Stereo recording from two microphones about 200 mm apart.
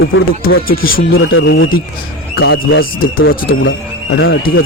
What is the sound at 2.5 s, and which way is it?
Speech, 50° left (ahead or behind).